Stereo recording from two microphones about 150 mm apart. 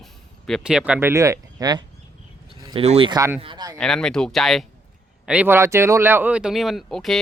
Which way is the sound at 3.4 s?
30° right (ahead or behind).